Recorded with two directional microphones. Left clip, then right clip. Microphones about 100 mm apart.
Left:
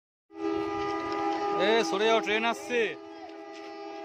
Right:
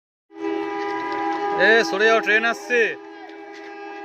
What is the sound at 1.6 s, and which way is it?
Speech, 20° left (ahead or behind).